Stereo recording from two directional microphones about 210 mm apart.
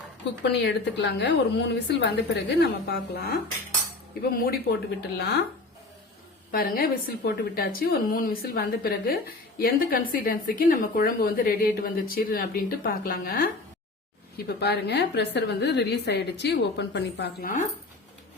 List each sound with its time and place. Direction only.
0.4 s a woman's voice: 55° left (ahead or behind)
4.3 s a woman's voice: 45° left (ahead or behind)
6.5 s a woman's voice: 45° left (ahead or behind)